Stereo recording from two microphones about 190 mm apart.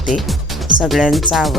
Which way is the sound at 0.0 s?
Centre (ahead or behind).